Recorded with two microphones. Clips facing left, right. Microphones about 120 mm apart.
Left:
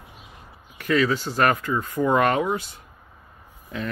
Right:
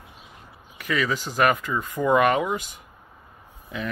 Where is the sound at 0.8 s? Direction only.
10° right (ahead or behind).